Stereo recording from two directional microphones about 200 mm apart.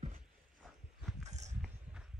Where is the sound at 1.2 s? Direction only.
35° right (ahead or behind).